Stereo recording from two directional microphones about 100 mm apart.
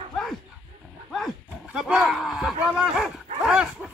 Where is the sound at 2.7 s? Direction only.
5° right (ahead or behind).